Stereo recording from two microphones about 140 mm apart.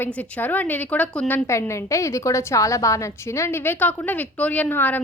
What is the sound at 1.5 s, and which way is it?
A woman's voice, 20° left (ahead or behind).